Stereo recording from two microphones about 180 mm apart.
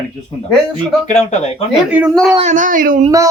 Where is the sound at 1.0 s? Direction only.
40° left (ahead or behind).